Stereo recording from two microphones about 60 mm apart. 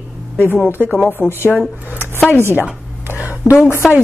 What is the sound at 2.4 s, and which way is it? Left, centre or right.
Speech, right.